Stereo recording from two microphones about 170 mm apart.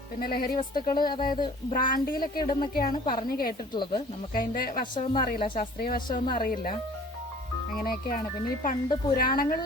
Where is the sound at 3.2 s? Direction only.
60° left (ahead or behind).